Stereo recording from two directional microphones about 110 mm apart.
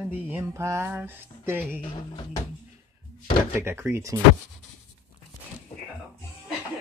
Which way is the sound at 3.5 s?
20° right (ahead or behind).